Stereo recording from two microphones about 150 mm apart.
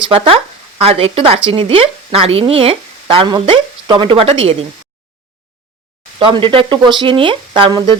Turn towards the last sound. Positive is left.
turn(degrees=-35)  # may be behind; listen again after turning